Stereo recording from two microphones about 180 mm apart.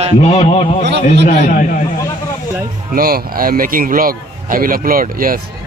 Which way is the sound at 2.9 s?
55° right (ahead or behind).